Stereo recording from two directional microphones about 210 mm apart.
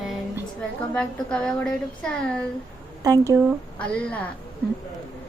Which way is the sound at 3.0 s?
15° right (ahead or behind).